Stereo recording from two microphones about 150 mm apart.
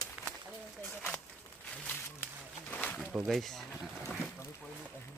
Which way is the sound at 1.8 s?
15° left (ahead or behind).